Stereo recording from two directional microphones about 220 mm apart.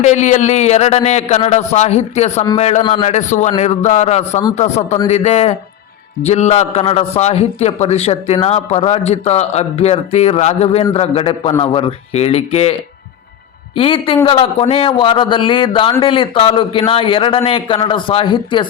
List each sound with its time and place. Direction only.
0.0 s a man's voice: 30° left (ahead or behind)
13.7 s a man's voice: 25° left (ahead or behind)